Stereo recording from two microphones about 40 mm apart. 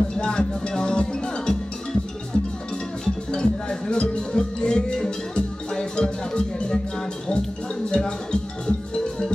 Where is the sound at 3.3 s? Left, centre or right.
Left.